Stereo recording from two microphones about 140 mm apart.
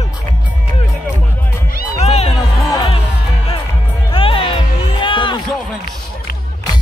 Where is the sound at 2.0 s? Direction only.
50° left (ahead or behind).